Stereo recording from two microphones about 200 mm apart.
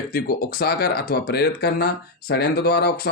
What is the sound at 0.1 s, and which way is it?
Speech, 50° left (ahead or behind).